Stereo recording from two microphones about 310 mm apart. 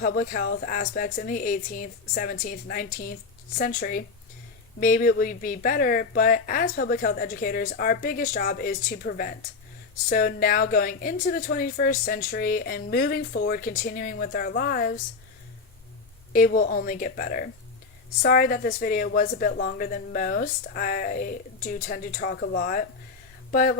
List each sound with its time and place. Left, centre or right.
0.0 s a woman's voice: left
16.3 s a woman's voice: left